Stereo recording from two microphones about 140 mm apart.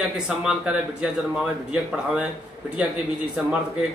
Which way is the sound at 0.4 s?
5° right (ahead or behind).